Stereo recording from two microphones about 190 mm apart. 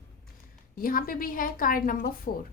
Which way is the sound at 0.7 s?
50° left (ahead or behind).